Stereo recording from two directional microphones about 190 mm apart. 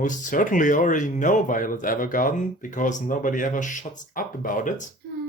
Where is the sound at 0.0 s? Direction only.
45° left (ahead or behind).